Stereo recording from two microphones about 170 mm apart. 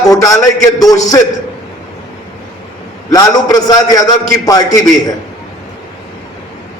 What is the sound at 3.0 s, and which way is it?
A man's voice, 20° left (ahead or behind).